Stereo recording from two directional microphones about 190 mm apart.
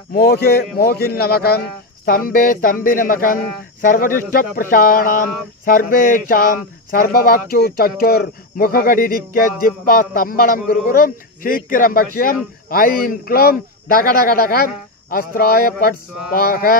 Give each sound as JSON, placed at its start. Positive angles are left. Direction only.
{"t": 0.1, "sound": "a man's voice", "side_deg": 55}